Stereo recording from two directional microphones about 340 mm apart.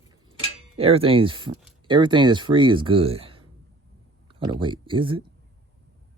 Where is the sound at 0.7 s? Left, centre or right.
Centre.